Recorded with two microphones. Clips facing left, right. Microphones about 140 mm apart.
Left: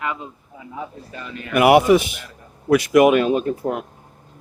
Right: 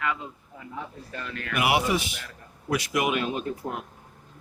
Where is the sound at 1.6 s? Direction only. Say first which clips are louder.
Left 11 dB; 55° left (ahead or behind); by 3.9 s 75° left (ahead or behind).